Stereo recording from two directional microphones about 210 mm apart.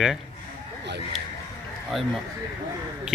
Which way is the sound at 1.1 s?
Centre (ahead or behind).